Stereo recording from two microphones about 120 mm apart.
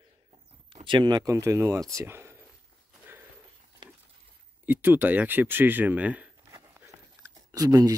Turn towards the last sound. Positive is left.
turn(degrees=-30)  # may be behind; listen again after turning